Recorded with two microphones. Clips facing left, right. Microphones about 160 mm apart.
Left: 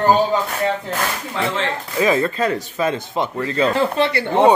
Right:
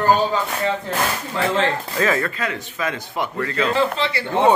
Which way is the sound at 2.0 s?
20° left (ahead or behind).